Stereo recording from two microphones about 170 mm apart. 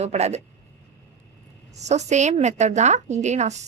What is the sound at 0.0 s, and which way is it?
Speech, 40° right (ahead or behind).